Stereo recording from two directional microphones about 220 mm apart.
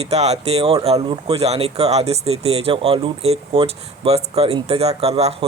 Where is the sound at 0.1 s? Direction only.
30° right (ahead or behind).